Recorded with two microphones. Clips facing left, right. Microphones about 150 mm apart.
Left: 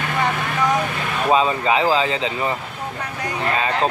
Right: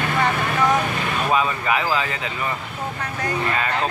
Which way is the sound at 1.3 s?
25° left (ahead or behind).